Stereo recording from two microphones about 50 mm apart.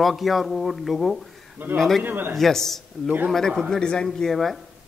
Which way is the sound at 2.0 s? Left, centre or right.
Right.